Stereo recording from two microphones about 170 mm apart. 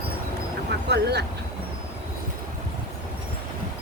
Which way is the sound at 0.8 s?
75° right (ahead or behind).